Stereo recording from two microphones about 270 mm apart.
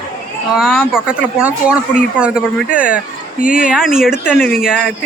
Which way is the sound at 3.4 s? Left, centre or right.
Left.